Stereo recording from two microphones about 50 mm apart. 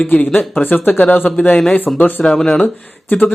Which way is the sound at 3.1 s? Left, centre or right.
Left.